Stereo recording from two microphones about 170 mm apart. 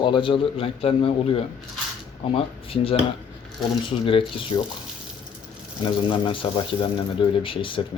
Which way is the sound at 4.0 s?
30° left (ahead or behind).